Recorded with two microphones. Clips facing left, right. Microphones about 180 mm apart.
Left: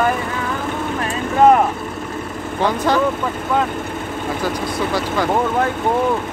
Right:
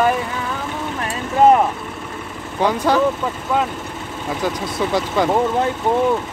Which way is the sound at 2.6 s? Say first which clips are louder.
Right 1 dB; 10° right (ahead or behind).